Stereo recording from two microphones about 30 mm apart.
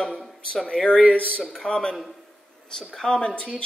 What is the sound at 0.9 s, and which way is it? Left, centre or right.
Speech, left.